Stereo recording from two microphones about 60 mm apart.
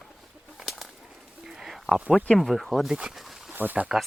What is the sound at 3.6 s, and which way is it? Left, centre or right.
Speech, right.